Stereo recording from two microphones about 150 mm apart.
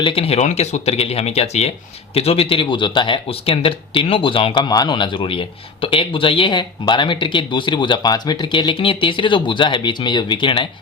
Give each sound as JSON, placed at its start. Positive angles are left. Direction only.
{"t": 0.0, "sound": "speech", "side_deg": 40}